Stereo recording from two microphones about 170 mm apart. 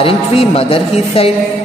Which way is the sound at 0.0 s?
35° left (ahead or behind).